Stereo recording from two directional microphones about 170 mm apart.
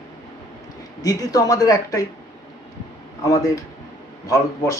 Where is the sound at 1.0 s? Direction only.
20° left (ahead or behind).